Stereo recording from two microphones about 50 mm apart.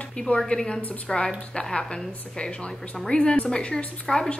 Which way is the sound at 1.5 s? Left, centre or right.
Centre.